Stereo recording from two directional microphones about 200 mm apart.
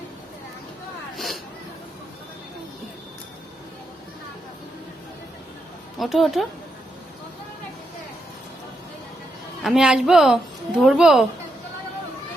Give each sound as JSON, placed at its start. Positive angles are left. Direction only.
{"t": 1.1, "sound": "a sound", "side_deg": 0}
{"t": 6.0, "sound": "a woman's voice", "side_deg": 0}
{"t": 9.6, "sound": "a woman's voice", "side_deg": -5}